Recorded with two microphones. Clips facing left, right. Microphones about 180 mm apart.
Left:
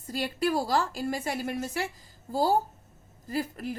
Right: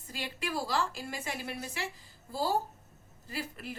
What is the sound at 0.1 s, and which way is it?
A woman's voice, 40° left (ahead or behind).